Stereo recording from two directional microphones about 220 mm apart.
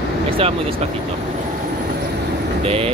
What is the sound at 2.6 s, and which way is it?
Speech, 25° right (ahead or behind).